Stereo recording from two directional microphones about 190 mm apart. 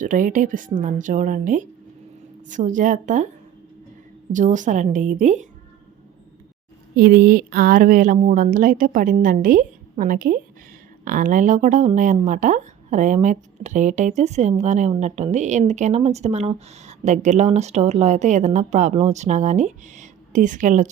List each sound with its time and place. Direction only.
0.0 s a woman's voice: 45° right (ahead or behind)
4.3 s speech: 40° right (ahead or behind)
6.9 s a woman's voice: 55° right (ahead or behind)